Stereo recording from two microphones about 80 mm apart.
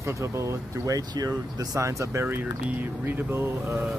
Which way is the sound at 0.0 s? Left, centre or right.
Right.